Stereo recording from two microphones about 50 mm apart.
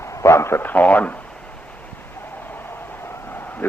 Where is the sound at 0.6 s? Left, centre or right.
Left.